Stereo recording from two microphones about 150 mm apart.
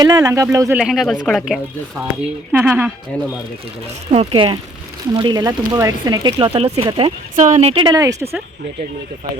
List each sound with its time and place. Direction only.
0.0 s speech: 25° right (ahead or behind)
0.8 s speech: 5° right (ahead or behind)
2.5 s speech: 15° right (ahead or behind)
3.1 s speech: 10° left (ahead or behind)
4.1 s speech: 40° right (ahead or behind)
6.3 s speech: 40° right (ahead or behind)
7.3 s speech: 50° right (ahead or behind)
7.9 s speech: 25° right (ahead or behind)